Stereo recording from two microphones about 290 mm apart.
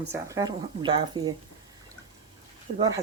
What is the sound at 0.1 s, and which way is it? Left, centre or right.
Speech, centre.